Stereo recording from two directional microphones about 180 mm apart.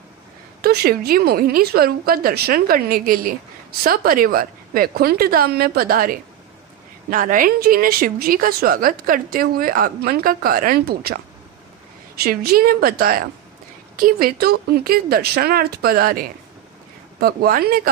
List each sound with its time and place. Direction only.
0.6 s a woman's voice: 55° right (ahead or behind)